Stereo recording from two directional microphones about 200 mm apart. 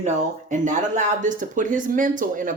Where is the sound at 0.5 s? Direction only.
40° right (ahead or behind).